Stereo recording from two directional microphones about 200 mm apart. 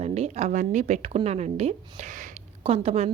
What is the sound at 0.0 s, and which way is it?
A woman's voice, 35° right (ahead or behind).